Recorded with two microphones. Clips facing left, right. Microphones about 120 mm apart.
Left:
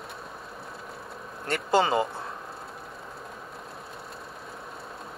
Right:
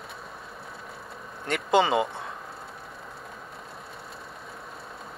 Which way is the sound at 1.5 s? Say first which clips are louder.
Right 1 dB; centre (ahead or behind).